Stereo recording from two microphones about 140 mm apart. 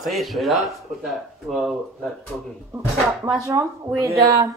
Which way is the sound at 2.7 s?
25° right (ahead or behind).